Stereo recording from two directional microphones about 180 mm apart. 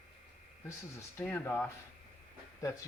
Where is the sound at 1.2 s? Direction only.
10° left (ahead or behind).